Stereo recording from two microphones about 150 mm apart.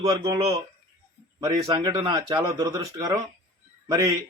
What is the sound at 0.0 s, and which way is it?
Speech, 25° right (ahead or behind).